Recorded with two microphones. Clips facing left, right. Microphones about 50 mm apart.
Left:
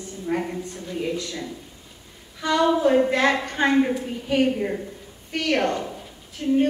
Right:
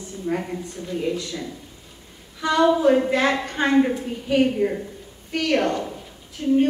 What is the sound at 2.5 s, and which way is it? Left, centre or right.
A woman's voice, centre.